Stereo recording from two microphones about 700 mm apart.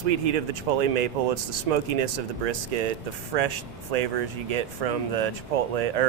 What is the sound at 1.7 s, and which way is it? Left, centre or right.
Speech, right.